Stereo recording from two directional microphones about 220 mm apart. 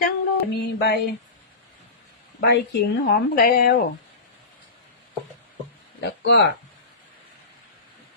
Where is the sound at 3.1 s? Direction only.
40° left (ahead or behind).